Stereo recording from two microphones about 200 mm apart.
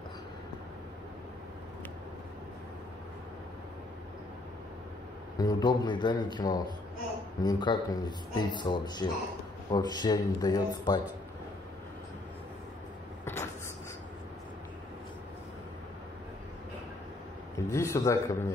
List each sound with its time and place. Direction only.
5.4 s speech: 20° left (ahead or behind)
13.2 s vehicle: 15° left (ahead or behind)
17.6 s a man's voice: 15° left (ahead or behind)